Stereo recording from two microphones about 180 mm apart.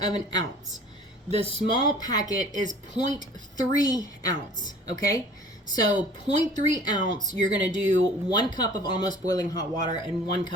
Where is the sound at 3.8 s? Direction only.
20° left (ahead or behind).